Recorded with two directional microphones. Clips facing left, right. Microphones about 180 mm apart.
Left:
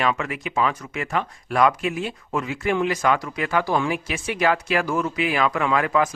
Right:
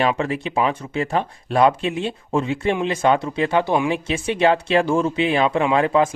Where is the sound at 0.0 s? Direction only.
30° right (ahead or behind).